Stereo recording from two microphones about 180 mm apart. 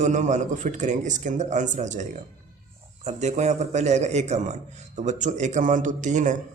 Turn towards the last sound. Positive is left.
turn(degrees=-45)  # may be behind; listen again after turning